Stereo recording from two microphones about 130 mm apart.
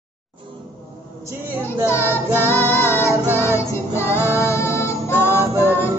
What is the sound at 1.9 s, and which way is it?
Child singing, 15° left (ahead or behind).